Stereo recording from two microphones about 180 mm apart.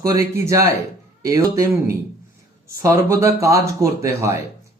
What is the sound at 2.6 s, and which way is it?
Speech, 15° right (ahead or behind).